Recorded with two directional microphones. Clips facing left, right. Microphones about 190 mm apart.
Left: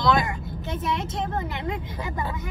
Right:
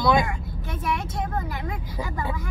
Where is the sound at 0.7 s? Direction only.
25° left (ahead or behind).